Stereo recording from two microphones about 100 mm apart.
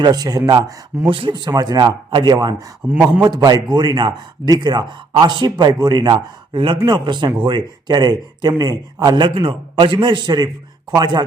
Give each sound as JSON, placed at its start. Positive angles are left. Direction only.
{"t": 0.0, "sound": "speech", "side_deg": -40}
{"t": 1.1, "sound": "speech", "side_deg": -60}
{"t": 1.5, "sound": "speech", "side_deg": -40}
{"t": 2.8, "sound": "speech", "side_deg": -15}
{"t": 3.2, "sound": "speech", "side_deg": -45}
{"t": 6.7, "sound": "speech", "side_deg": -45}